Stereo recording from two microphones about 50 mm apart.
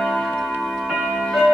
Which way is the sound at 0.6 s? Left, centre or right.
Centre.